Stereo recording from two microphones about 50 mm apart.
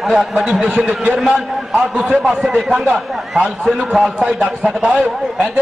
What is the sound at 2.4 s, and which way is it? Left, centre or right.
A man's voice, centre.